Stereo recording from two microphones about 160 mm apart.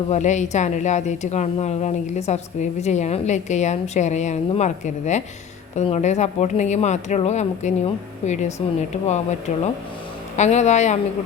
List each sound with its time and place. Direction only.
0.1 s a woman's voice: 50° left (ahead or behind)
10.3 s a woman's voice: 45° left (ahead or behind)